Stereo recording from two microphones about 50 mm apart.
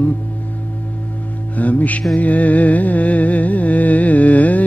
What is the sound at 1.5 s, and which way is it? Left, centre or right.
Music, left.